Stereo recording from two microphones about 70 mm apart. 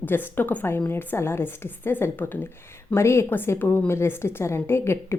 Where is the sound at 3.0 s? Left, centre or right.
Left.